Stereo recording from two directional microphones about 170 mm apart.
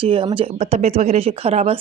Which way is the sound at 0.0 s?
30° right (ahead or behind).